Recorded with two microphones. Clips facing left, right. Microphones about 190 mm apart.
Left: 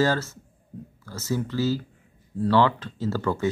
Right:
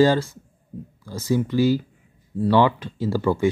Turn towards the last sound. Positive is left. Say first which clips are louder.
# right 4 dB
turn(degrees=-10)  # may be behind; listen again after turning